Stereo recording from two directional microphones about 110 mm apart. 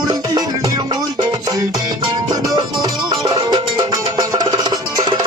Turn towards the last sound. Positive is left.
turn(degrees=-35)  # may be behind; listen again after turning